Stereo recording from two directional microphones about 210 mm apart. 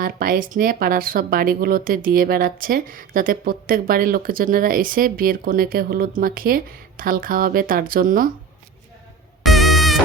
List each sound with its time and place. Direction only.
0.0 s speech: 45° right (ahead or behind)
9.4 s music: centre (ahead or behind)